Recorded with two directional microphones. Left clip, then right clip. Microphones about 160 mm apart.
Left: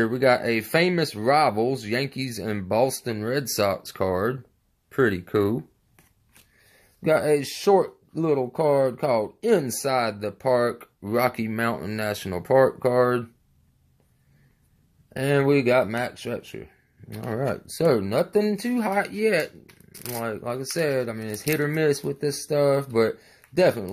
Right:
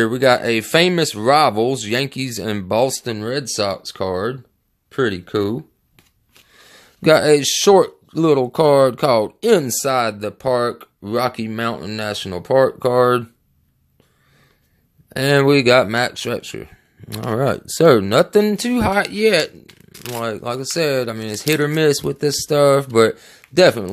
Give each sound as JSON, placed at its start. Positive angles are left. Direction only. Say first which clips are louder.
{"t": 0.0, "sound": "speech", "louder": "right 6 dB", "side_deg": -25}
{"t": 7.0, "sound": "speech", "louder": "right 8 dB", "side_deg": -40}
{"t": 12.7, "sound": "speech", "louder": "right 6 dB", "side_deg": -30}
{"t": 15.1, "sound": "speech", "louder": "right 7 dB", "side_deg": -40}